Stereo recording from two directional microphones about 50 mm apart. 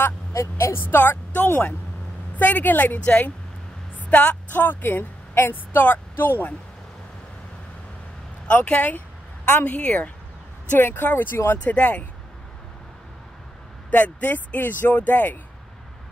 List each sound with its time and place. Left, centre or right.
0.4 s a woman's voice: left
0.8 s a woman's voice: left
8.5 s speech: left
9.7 s speech: left
10.7 s speech: left
11.5 s speech: left
13.8 s a woman's voice: left